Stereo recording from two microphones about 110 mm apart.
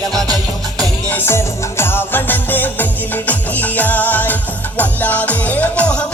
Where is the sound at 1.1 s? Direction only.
20° left (ahead or behind).